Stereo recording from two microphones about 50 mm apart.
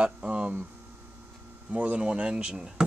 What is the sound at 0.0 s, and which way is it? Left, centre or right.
Hum, right.